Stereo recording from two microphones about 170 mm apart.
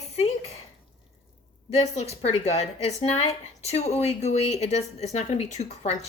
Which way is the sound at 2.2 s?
40° left (ahead or behind).